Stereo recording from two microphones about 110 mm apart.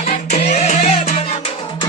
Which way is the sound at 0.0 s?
75° left (ahead or behind).